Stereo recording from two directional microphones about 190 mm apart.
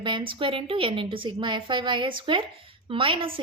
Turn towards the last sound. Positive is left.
turn(degrees=-25)  # may be behind; listen again after turning